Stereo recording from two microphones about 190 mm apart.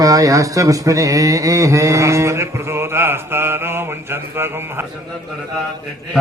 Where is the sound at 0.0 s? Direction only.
20° right (ahead or behind).